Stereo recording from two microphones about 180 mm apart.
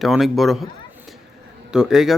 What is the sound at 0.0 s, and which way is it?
Speech, centre (ahead or behind).